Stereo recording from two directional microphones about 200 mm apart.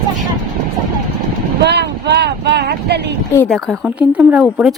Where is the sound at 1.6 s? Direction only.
55° right (ahead or behind).